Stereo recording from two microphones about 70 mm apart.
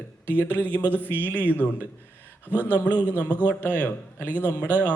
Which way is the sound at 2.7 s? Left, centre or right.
Left.